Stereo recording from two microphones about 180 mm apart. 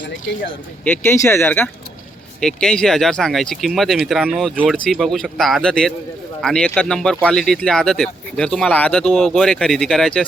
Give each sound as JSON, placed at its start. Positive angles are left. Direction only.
{"t": 0.9, "sound": "speech", "side_deg": 15}